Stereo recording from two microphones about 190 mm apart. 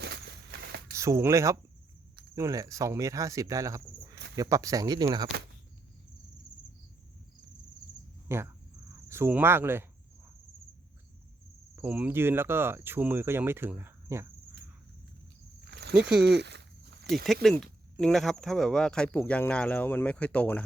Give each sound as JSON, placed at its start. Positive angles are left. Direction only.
{"t": 0.0, "sound": "a sound", "side_deg": -60}
{"t": 0.9, "sound": "speech", "side_deg": -15}
{"t": 8.3, "sound": "speech", "side_deg": -15}
{"t": 11.8, "sound": "speech", "side_deg": -10}
{"t": 15.6, "sound": "cricket", "side_deg": -60}
{"t": 16.4, "sound": "walk", "side_deg": -60}
{"t": 17.4, "sound": "speech", "side_deg": 5}